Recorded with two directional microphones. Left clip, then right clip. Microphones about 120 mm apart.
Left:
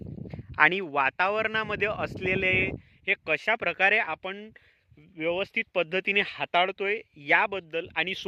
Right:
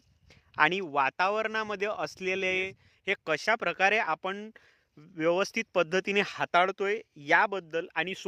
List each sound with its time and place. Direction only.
0.3 s a man's voice: centre (ahead or behind)
3.1 s speech: 20° right (ahead or behind)
4.2 s speech: 30° right (ahead or behind)
5.1 s speech: 50° right (ahead or behind)
5.7 s speech: 35° right (ahead or behind)
6.5 s a man's voice: 25° right (ahead or behind); by 8.3 s 5° right (ahead or behind)